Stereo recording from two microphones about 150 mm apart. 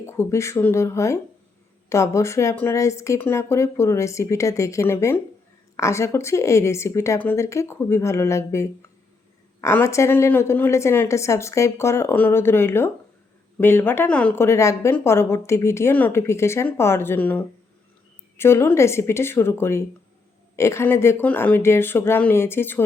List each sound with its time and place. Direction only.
0.0 s a woman's voice: 15° left (ahead or behind)